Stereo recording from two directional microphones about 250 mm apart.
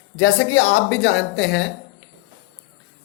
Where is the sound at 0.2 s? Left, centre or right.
Left.